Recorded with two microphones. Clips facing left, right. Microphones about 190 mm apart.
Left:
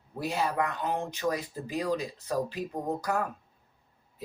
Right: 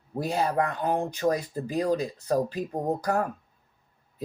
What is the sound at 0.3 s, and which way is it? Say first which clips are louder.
Speech: right 3 dB; 35° right (ahead or behind).